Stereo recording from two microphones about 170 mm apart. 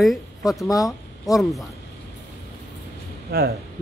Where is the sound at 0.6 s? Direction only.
20° left (ahead or behind).